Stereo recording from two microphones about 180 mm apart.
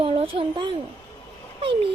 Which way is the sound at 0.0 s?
30° right (ahead or behind).